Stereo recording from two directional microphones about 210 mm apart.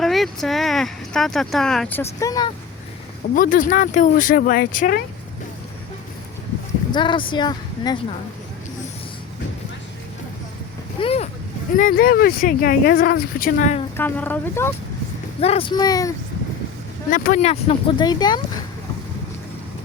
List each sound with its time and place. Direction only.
0.0 s speech: centre (ahead or behind); by 2.5 s 15° left (ahead or behind)
3.3 s speech: 40° left (ahead or behind)
6.9 s speech: 20° left (ahead or behind)
11.0 s speech: 30° left (ahead or behind)
11.8 s speech: 40° left (ahead or behind)
13.9 s speech: 10° left (ahead or behind)
15.4 s speech: 30° left (ahead or behind)
17.1 s speech: 40° left (ahead or behind); by 18.6 s 20° left (ahead or behind)